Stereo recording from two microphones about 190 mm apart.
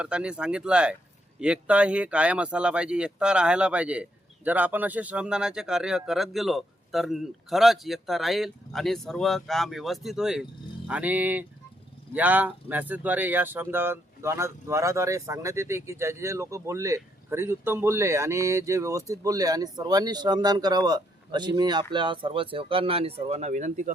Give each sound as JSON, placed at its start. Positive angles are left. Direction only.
{"t": 0.0, "sound": "speech", "side_deg": -5}